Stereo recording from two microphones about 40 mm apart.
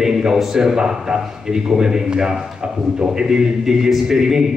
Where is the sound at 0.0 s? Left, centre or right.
Centre.